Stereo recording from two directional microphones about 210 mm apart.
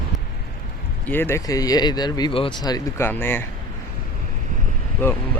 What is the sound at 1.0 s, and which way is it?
Speech, 10° left (ahead or behind).